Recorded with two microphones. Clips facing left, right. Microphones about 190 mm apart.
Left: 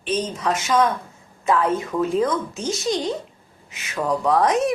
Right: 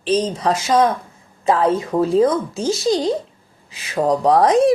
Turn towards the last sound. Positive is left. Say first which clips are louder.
# right 5 dB
turn(degrees=-35)  # may be behind; listen again after turning